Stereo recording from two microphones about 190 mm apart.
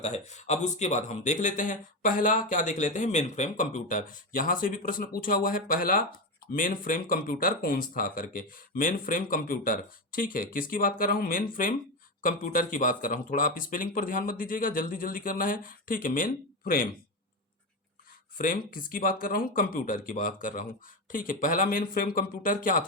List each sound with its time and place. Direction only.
0.0 s speech: 35° left (ahead or behind)
18.3 s speech: 45° left (ahead or behind)